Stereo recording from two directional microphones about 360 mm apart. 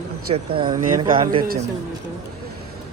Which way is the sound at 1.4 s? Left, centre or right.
Right.